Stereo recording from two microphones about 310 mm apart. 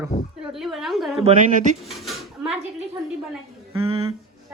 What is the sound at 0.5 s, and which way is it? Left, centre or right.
Speech, centre.